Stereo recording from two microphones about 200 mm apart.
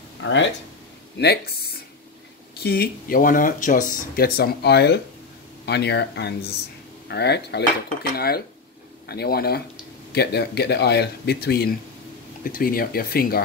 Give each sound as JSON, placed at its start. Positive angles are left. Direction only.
{"t": 0.2, "sound": "speech", "side_deg": 65}
{"t": 1.1, "sound": "speech", "side_deg": 55}
{"t": 9.0, "sound": "speech", "side_deg": 50}